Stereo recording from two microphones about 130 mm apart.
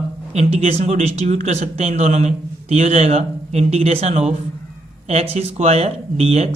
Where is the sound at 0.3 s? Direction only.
55° right (ahead or behind).